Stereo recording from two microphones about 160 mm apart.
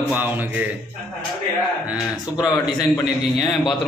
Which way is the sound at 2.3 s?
25° left (ahead or behind).